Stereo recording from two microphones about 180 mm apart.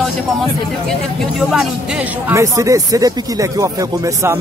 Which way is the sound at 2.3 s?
15° right (ahead or behind).